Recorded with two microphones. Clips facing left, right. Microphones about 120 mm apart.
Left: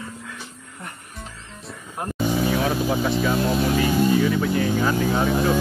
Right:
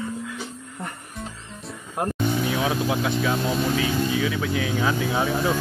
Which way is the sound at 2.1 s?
5° left (ahead or behind).